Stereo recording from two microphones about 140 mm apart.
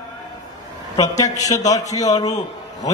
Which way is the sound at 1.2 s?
25° left (ahead or behind).